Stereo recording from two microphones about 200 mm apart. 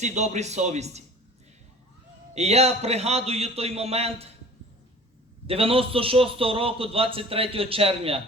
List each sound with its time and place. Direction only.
0.0 s a man's voice: 35° right (ahead or behind)
2.3 s a man's voice: 30° right (ahead or behind)
5.5 s a man's voice: 30° right (ahead or behind)